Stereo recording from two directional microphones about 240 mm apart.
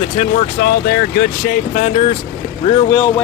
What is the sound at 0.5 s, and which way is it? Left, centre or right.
Speech, left.